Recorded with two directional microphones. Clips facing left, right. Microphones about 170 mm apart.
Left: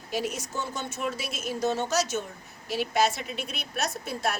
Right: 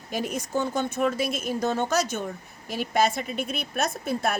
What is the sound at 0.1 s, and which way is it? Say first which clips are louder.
A woman's voice: right 3 dB; 50° right (ahead or behind).